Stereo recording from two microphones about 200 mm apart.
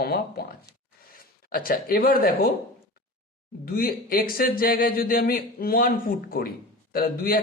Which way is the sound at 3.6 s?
50° left (ahead or behind).